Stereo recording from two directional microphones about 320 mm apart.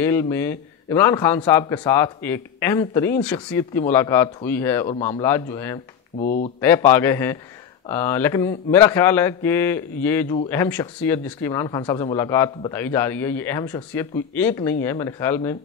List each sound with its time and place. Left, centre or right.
0.0 s speech: centre
6.1 s speech: left
6.6 s speech: centre